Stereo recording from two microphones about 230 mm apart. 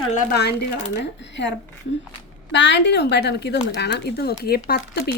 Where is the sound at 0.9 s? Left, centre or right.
Left.